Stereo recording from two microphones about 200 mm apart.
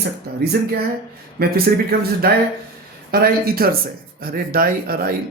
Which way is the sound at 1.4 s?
50° right (ahead or behind).